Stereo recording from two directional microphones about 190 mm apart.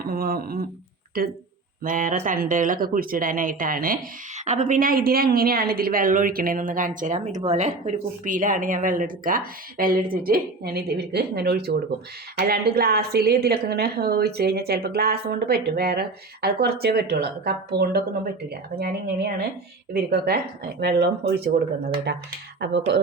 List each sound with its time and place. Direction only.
0.0 s speech: 50° right (ahead or behind)
1.8 s a woman's voice: 45° right (ahead or behind); by 22.8 s 60° right (ahead or behind)